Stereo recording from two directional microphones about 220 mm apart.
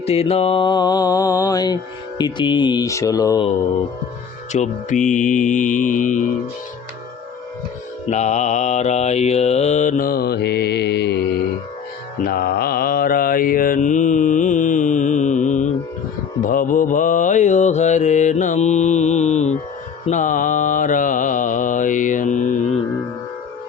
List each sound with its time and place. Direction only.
0.0 s mantra: 30° left (ahead or behind)
4.5 s mantra: 35° left (ahead or behind)
8.1 s mantra: 30° left (ahead or behind)